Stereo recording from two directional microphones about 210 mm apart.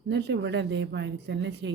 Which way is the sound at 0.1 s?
55° right (ahead or behind).